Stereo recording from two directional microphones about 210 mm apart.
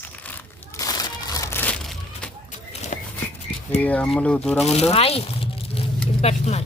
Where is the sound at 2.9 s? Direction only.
35° left (ahead or behind).